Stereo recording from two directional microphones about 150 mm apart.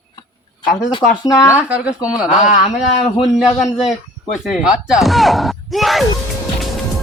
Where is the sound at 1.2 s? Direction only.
20° left (ahead or behind).